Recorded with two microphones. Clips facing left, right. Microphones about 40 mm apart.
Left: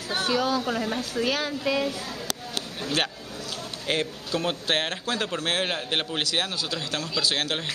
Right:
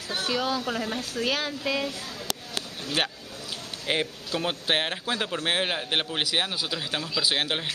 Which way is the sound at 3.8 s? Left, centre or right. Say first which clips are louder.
Even; centre.